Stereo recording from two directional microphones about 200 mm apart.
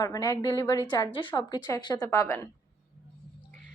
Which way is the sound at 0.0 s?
20° left (ahead or behind).